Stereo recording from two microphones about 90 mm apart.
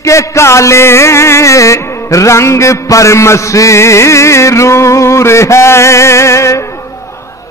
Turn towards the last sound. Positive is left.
turn(degrees=35)  # may be behind; listen again after turning